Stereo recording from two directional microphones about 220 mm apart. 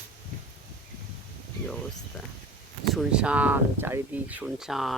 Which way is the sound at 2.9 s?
5° right (ahead or behind).